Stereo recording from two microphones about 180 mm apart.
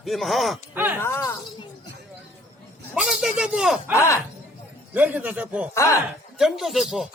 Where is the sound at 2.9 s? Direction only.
5° right (ahead or behind).